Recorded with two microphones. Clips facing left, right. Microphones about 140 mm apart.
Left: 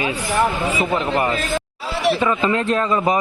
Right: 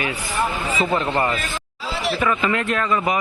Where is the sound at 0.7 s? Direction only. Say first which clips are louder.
Left 1 dB; 5° left (ahead or behind).